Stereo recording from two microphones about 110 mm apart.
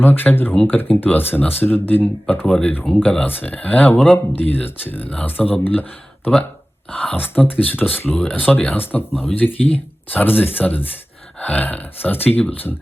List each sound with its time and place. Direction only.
0.0 s speech: 15° left (ahead or behind)
0.5 s speech: 5° left (ahead or behind)
0.8 s speech: 20° left (ahead or behind)
9.4 s speech: centre (ahead or behind)
10.1 s speech: 15° left (ahead or behind)